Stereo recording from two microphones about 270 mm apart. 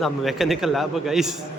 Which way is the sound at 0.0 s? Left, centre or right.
Centre.